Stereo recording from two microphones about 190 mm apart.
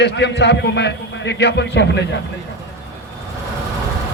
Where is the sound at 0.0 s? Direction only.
65° left (ahead or behind).